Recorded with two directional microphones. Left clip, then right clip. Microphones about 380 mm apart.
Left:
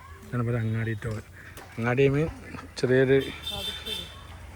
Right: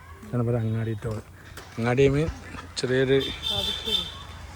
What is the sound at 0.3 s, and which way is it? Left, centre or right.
Speech, centre.